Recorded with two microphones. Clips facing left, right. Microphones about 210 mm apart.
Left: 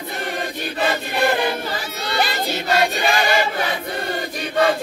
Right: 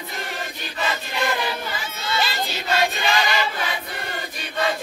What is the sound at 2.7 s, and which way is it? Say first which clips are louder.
Choir: left 3 dB; 45° left (ahead or behind).